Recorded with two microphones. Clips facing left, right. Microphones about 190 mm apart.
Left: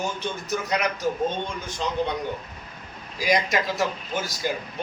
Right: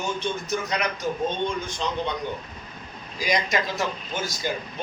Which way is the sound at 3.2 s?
5° left (ahead or behind).